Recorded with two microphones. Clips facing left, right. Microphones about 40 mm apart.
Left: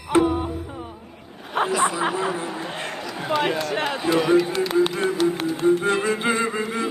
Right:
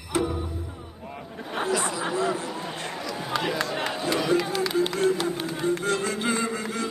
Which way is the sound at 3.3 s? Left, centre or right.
Left.